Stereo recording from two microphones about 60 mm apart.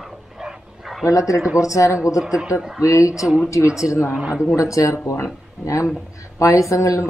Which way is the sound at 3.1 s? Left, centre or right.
Centre.